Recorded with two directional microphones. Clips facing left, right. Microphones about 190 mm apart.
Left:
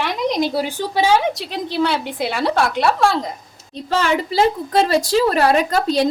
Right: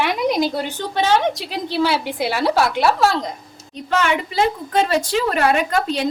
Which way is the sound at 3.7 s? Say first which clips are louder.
Left 1 dB; 35° left (ahead or behind).